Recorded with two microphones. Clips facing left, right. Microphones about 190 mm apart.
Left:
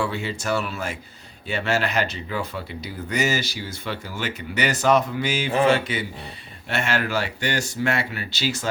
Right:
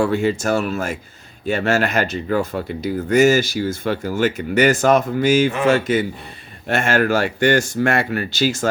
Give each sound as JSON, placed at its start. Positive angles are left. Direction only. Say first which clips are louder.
{"t": 0.0, "sound": "speech", "louder": "right 9 dB", "side_deg": -45}